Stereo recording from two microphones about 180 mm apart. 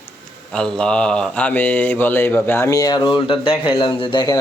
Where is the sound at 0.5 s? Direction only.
5° left (ahead or behind).